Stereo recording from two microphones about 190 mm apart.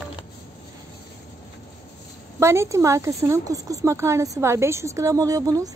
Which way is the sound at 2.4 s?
15° right (ahead or behind).